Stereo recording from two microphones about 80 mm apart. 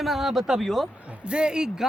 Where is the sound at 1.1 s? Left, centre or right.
Centre.